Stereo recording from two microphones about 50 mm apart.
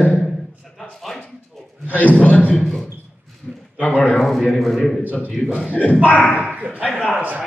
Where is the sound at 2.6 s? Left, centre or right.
Centre.